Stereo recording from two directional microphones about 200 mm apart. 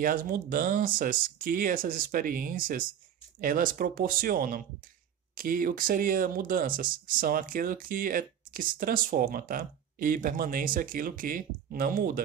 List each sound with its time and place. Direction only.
0.0 s speech: 45° right (ahead or behind)